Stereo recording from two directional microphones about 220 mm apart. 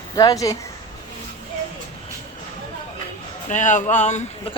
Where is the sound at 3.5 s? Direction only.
35° left (ahead or behind).